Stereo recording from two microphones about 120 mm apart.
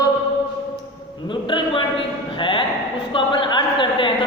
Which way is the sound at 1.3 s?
40° left (ahead or behind).